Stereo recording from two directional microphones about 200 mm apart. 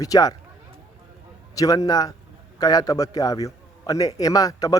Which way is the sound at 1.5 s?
20° left (ahead or behind).